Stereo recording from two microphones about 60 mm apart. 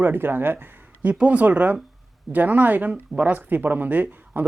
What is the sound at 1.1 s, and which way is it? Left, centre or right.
Speech, right.